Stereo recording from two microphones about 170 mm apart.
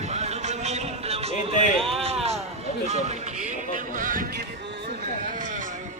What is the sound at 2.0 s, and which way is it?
Run, 40° right (ahead or behind).